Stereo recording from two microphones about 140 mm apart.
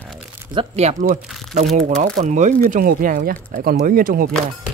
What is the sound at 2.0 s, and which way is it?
Speech, 55° right (ahead or behind).